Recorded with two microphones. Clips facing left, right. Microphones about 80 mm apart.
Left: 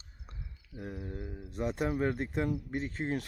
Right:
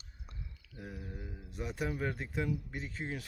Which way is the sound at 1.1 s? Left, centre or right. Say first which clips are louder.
Left 5 dB; left.